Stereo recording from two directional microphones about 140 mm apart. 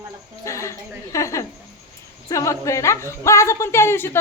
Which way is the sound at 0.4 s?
20° left (ahead or behind).